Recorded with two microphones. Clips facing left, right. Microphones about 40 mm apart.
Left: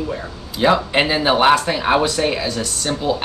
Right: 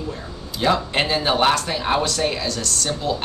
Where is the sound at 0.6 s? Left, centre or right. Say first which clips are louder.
Left 4 dB; centre.